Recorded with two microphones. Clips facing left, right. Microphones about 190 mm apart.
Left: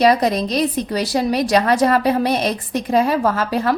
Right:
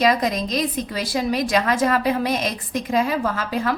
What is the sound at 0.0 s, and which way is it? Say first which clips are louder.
A woman's voice: left 4 dB; 35° left (ahead or behind).